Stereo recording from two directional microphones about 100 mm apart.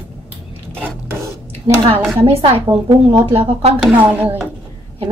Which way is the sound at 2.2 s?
75° right (ahead or behind).